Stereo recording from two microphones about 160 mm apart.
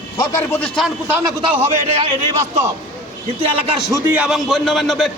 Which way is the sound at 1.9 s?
40° right (ahead or behind).